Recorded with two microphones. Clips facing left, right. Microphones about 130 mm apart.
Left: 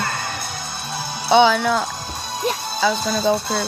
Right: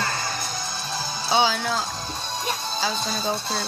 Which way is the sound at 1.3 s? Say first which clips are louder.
Left 8 dB; 60° left (ahead or behind).